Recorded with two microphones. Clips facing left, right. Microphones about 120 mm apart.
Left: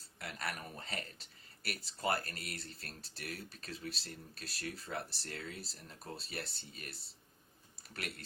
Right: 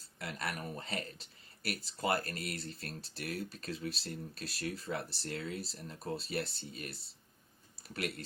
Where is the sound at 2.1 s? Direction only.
40° right (ahead or behind).